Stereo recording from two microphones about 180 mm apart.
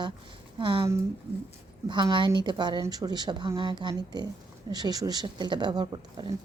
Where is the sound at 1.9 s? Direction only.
25° right (ahead or behind).